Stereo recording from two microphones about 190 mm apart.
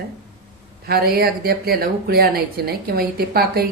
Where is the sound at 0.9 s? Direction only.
55° right (ahead or behind).